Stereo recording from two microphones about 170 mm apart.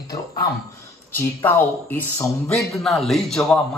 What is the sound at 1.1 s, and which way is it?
Speech, 10° left (ahead or behind).